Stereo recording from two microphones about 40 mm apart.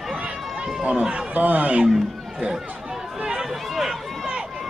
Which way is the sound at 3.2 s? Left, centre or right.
Centre.